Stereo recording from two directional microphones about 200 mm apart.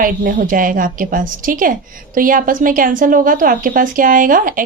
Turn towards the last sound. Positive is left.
turn(degrees=-45)  # may be behind; listen again after turning